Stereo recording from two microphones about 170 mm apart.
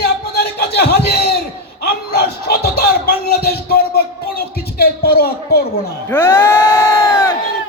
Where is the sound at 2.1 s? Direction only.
70° left (ahead or behind).